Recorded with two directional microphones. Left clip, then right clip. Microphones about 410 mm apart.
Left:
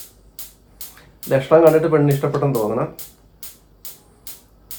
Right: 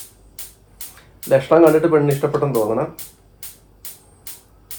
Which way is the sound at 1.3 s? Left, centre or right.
Centre.